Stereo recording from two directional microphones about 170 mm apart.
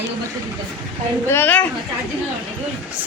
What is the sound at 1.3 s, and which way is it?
Speech, 10° left (ahead or behind).